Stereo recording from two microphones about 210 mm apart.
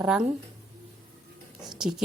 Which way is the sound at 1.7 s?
Centre (ahead or behind).